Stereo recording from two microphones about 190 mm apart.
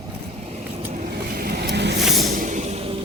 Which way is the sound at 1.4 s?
55° right (ahead or behind).